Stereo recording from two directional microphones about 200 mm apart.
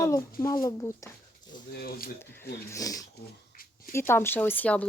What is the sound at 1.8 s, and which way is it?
Speech, 50° left (ahead or behind).